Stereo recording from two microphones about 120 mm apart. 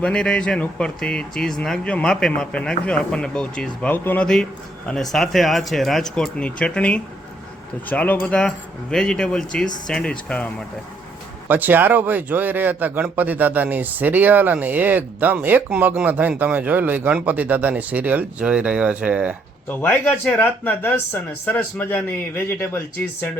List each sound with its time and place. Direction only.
0.0 s speech: 5° left (ahead or behind)
11.4 s speech: 15° right (ahead or behind)
19.6 s speech: 15° left (ahead or behind)